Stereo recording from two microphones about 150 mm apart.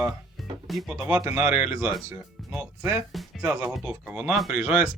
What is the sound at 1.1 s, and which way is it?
Speech, 10° right (ahead or behind).